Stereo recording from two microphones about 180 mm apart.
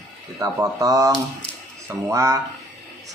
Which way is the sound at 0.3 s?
20° right (ahead or behind).